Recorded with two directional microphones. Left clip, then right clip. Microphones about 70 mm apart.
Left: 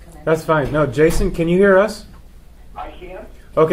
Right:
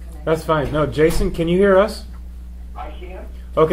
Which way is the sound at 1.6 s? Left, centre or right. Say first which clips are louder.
Left 1 dB; centre.